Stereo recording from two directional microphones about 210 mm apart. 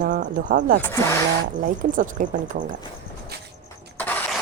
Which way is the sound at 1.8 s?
40° right (ahead or behind).